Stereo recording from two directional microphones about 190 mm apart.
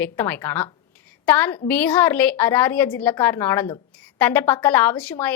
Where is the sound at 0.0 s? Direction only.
10° left (ahead or behind).